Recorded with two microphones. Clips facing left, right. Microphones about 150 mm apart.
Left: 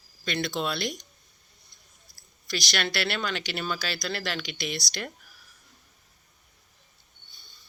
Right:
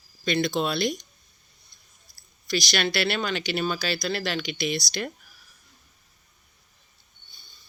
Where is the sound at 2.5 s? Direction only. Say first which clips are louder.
Right 4 dB; 15° right (ahead or behind).